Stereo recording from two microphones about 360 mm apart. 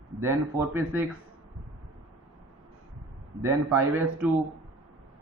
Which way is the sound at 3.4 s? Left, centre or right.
Centre.